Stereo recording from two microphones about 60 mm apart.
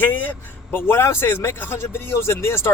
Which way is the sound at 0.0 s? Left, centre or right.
Left.